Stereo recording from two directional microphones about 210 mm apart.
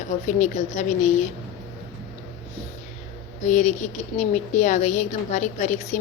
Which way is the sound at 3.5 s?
35° left (ahead or behind).